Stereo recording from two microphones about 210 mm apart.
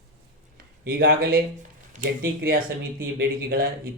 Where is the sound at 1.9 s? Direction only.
40° right (ahead or behind).